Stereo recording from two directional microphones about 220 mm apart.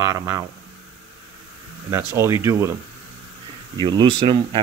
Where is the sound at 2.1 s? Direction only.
10° right (ahead or behind).